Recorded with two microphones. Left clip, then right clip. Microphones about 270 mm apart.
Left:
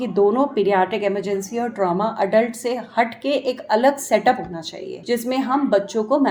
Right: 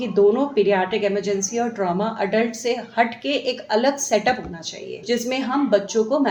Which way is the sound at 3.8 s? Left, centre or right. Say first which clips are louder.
Left 4 dB; left.